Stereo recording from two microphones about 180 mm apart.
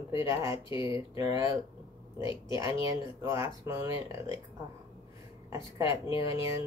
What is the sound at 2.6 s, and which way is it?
Speech, 20° right (ahead or behind).